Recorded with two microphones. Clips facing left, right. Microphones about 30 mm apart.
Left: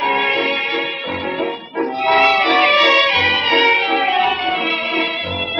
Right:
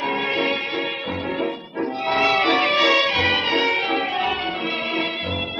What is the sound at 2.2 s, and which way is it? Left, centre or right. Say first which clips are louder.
Music: left 2 dB; centre.